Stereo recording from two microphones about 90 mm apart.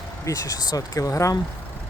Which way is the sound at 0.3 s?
40° left (ahead or behind).